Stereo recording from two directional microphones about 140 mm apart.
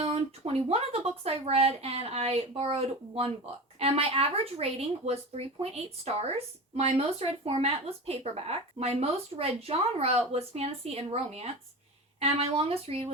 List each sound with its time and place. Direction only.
0.0 s speech: 45° right (ahead or behind)